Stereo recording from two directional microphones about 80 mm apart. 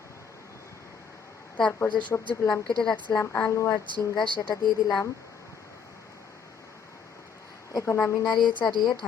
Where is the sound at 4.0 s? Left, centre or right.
Left.